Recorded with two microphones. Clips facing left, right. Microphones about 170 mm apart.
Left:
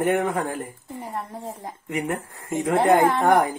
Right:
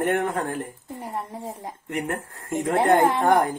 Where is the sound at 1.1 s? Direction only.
15° right (ahead or behind).